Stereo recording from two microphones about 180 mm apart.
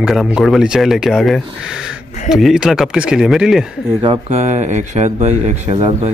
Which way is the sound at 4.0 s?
35° right (ahead or behind).